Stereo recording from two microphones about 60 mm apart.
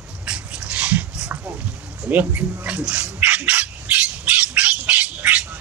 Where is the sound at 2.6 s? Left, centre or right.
Right.